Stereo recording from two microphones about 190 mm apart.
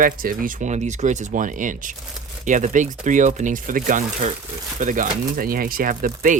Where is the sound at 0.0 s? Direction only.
50° right (ahead or behind).